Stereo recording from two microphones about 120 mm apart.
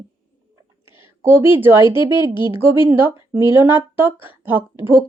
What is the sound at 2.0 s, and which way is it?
Speech, 40° left (ahead or behind).